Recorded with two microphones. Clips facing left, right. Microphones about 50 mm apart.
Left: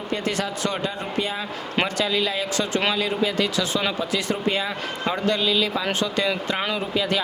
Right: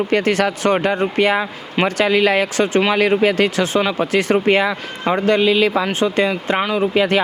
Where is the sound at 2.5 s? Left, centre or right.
Right.